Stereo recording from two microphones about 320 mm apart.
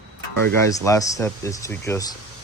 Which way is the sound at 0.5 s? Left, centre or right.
Centre.